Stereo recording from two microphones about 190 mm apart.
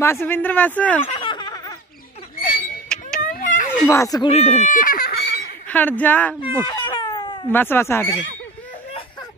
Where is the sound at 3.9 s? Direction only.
15° left (ahead or behind).